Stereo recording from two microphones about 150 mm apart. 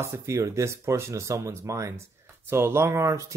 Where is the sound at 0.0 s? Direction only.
20° right (ahead or behind).